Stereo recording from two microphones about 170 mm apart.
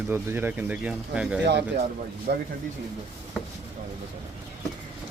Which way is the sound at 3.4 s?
5° left (ahead or behind).